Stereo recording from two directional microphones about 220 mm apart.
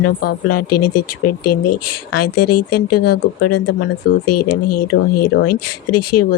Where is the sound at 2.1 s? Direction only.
90° left.